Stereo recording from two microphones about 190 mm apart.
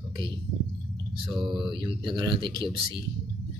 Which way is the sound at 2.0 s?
25° right (ahead or behind).